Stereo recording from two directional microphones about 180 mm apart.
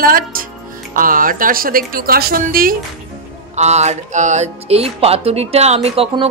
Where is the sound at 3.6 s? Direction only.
40° right (ahead or behind).